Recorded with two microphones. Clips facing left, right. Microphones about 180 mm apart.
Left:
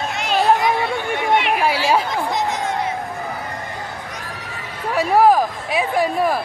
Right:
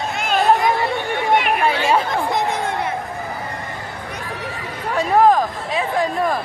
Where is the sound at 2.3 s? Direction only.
55° right (ahead or behind).